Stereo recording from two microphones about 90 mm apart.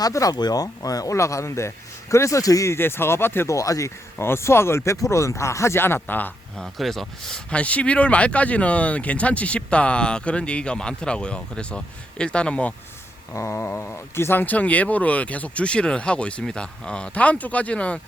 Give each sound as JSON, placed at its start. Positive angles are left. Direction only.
{"t": 0.0, "sound": "speech", "side_deg": 40}
{"t": 6.6, "sound": "speech", "side_deg": 0}
{"t": 13.3, "sound": "speech", "side_deg": 30}